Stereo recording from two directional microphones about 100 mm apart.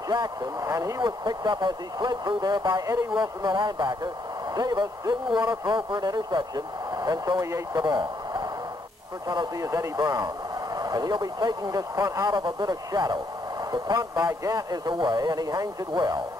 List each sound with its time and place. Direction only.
0.1 s speech: 45° right (ahead or behind)
9.6 s speech: 30° right (ahead or behind)